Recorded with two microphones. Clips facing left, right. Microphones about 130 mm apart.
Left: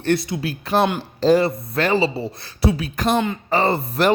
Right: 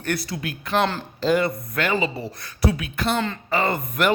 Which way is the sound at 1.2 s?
35° left (ahead or behind).